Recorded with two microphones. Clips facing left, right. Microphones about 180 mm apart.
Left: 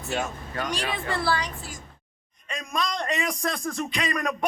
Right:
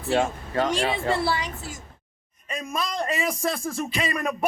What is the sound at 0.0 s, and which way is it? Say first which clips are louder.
A man's voice: right 6 dB; 30° right (ahead or behind).